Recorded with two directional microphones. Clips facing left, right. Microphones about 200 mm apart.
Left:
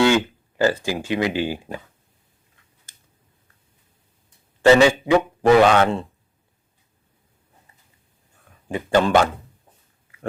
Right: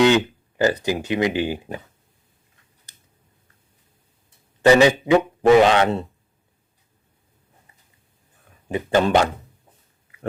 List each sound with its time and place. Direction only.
0.0 s speech: 20° right (ahead or behind)
4.6 s a man's voice: 15° right (ahead or behind)
8.7 s a man's voice: 20° right (ahead or behind)